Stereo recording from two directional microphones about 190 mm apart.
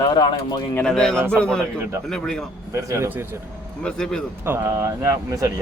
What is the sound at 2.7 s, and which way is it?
Speech, 15° right (ahead or behind).